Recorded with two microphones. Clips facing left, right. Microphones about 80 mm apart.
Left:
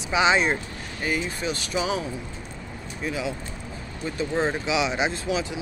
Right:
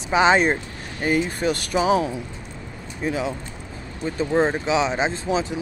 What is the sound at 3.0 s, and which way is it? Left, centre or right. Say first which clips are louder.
Speech: right 4 dB; right.